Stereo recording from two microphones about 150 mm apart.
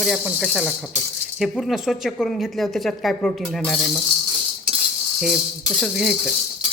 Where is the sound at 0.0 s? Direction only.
Centre (ahead or behind).